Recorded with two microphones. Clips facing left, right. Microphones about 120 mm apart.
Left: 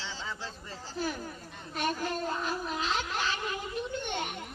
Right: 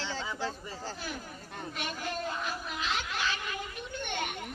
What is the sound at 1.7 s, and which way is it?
Speech, 40° left (ahead or behind).